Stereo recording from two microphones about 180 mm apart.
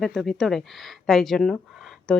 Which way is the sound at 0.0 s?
Centre (ahead or behind).